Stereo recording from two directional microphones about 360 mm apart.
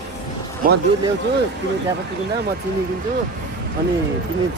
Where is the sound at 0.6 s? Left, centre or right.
Right.